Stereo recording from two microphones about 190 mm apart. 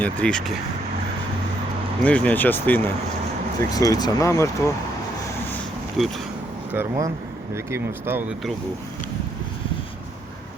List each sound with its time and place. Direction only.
0.0 s speech: 5° left (ahead or behind)
2.0 s speech: 5° left (ahead or behind)
6.7 s speech: 15° right (ahead or behind)